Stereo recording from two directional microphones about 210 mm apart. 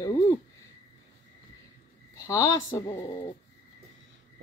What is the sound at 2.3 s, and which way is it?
Speech, 15° left (ahead or behind).